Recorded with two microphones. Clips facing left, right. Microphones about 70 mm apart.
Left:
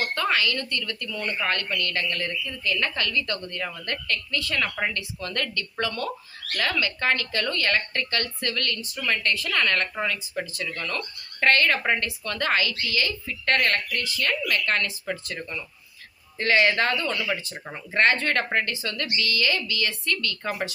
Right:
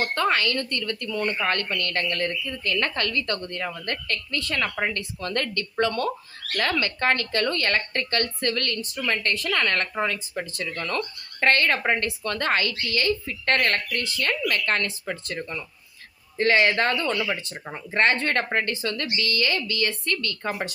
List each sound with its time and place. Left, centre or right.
0.0 s a woman's voice: right
16.4 s a woman's voice: right
17.2 s speech: centre
17.9 s a woman's voice: right